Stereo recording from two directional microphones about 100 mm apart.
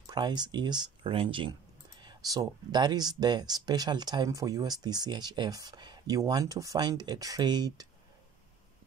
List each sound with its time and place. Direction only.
0.0 s speech: 45° right (ahead or behind)
1.1 s speech: 60° right (ahead or behind)
1.5 s speech: 45° right (ahead or behind)